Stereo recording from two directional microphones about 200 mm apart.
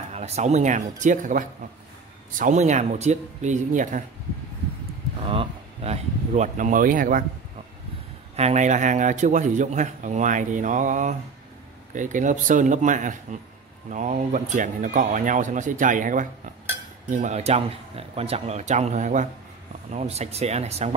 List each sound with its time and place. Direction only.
0.1 s a man's voice: 35° right (ahead or behind)
5.2 s speech: 25° right (ahead or behind); by 7.2 s 45° right (ahead or behind)
8.4 s a man's voice: 35° right (ahead or behind)